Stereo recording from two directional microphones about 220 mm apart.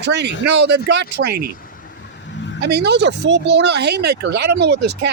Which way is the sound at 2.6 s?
50° right (ahead or behind).